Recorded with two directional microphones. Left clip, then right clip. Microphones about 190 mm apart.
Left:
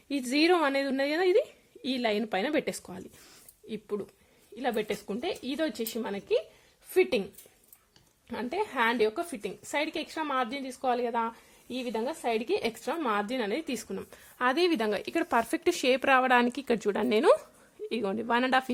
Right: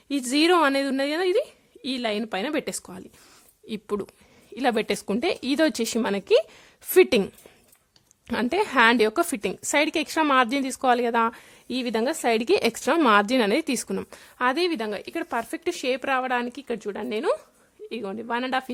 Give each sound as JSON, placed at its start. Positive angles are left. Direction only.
{"t": 0.1, "sound": "a woman's voice", "side_deg": -25}
{"t": 3.7, "sound": "a woman's voice", "side_deg": -40}
{"t": 8.3, "sound": "a woman's voice", "side_deg": -45}
{"t": 14.3, "sound": "speech", "side_deg": -15}